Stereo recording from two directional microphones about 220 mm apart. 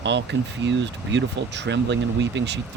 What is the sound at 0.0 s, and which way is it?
Speech, 55° right (ahead or behind).